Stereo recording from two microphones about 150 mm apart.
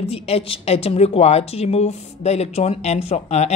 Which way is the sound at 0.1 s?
40° left (ahead or behind).